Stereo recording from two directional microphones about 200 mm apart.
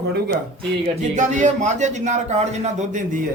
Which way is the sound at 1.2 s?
35° right (ahead or behind).